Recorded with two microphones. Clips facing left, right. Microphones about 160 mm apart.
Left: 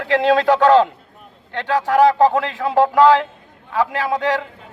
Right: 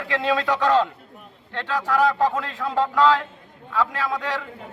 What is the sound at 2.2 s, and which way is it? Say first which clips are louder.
A man's voice: left 7 dB; 70° left (ahead or behind).